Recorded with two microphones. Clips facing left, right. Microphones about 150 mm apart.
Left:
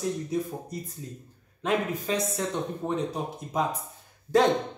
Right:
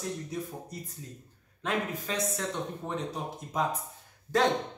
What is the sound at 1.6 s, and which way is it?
Speech, 15° left (ahead or behind).